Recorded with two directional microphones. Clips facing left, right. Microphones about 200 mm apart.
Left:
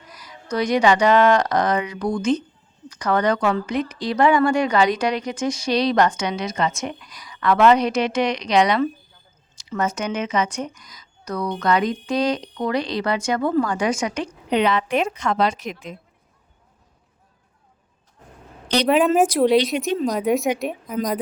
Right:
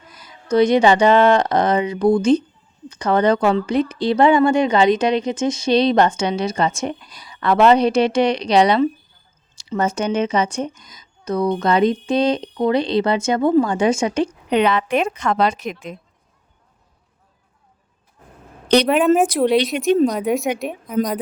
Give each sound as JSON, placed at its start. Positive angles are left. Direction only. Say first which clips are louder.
{"t": 0.1, "sound": "a woman's voice", "louder": "right 8 dB", "side_deg": -25}
{"t": 14.5, "sound": "a woman's voice", "louder": "right 2 dB", "side_deg": -60}
{"t": 18.9, "sound": "a woman's voice", "louder": "right 1 dB", "side_deg": 0}